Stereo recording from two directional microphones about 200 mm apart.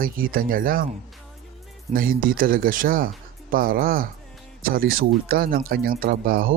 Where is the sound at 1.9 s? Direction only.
45° right (ahead or behind).